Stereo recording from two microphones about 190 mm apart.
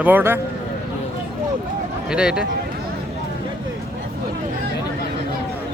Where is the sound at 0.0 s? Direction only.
10° right (ahead or behind).